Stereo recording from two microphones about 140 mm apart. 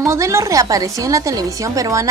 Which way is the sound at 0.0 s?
20° right (ahead or behind).